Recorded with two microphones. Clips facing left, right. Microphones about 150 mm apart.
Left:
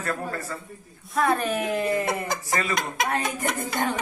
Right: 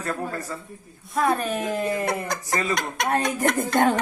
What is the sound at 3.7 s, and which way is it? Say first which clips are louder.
Speech: right 8 dB; 55° right (ahead or behind).